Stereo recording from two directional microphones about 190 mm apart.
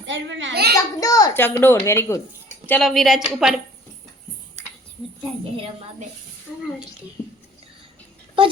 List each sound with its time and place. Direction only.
0.1 s a child's voice: 75° right (ahead or behind)
0.9 s a child's voice: 20° left (ahead or behind); by 3.5 s centre (ahead or behind)
7.2 s whispering: 10° left (ahead or behind)